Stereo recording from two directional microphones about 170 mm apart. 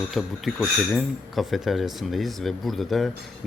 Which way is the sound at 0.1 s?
Centre (ahead or behind).